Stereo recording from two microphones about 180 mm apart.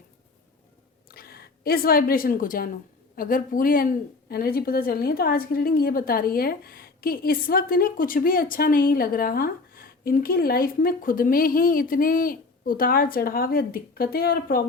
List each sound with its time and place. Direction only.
1.0 s a woman's voice: 55° left (ahead or behind)